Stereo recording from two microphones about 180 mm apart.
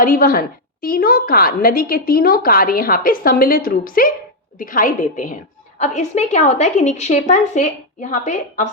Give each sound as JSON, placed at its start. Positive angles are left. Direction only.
{"t": 0.0, "sound": "a woman's voice", "side_deg": 50}